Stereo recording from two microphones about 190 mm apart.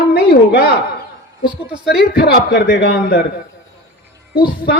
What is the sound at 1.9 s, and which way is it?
A man's voice, 55° left (ahead or behind).